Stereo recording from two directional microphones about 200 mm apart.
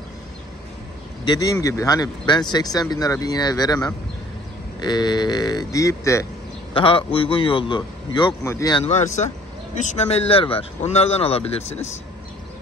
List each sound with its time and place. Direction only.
1.2 s speech: 20° left (ahead or behind)
6.7 s speech: 25° left (ahead or behind)
8.8 s speech: 35° left (ahead or behind)